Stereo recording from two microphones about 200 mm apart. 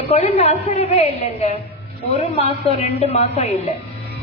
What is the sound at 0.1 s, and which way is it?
A woman's voice, 30° left (ahead or behind).